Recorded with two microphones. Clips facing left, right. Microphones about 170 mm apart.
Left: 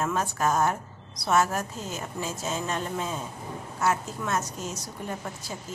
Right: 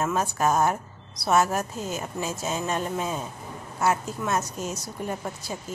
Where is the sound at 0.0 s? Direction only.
10° right (ahead or behind).